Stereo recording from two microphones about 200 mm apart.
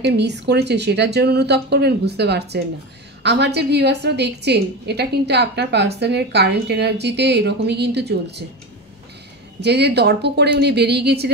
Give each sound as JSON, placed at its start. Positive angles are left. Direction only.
{"t": 0.0, "sound": "a woman's voice", "side_deg": -60}
{"t": 9.6, "sound": "a woman's voice", "side_deg": -55}